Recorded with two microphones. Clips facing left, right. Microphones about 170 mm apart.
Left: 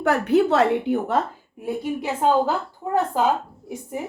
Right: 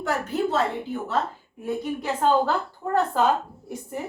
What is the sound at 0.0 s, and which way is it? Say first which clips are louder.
A woman's voice: left 7 dB; 65° left (ahead or behind).